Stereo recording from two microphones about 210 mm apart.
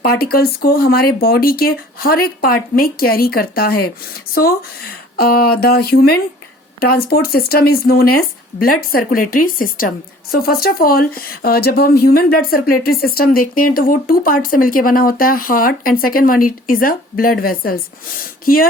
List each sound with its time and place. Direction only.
0.0 s speech: 45° left (ahead or behind)